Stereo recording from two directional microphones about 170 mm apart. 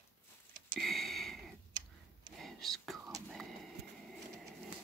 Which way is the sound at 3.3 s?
Centre (ahead or behind).